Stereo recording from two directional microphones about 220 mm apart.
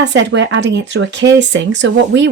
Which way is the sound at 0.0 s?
55° right (ahead or behind).